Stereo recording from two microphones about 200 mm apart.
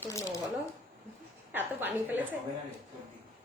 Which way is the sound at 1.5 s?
10° right (ahead or behind).